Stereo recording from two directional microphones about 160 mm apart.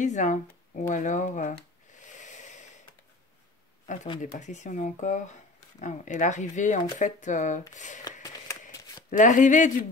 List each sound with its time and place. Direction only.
0.0 s speech: 50° left (ahead or behind)
2.0 s a sound: 50° left (ahead or behind)
3.8 s speech: 50° left (ahead or behind)
8.0 s shuffling cards: 20° left (ahead or behind)
9.1 s speech: 55° left (ahead or behind)